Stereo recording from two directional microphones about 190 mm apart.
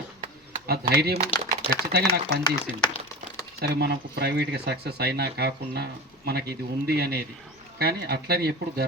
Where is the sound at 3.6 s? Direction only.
60° right (ahead or behind).